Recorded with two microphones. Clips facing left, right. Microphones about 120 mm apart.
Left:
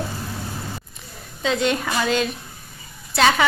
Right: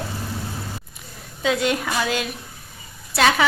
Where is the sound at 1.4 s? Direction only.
5° right (ahead or behind).